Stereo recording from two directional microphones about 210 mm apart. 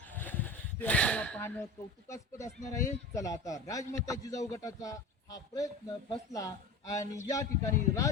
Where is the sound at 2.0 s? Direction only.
15° left (ahead or behind).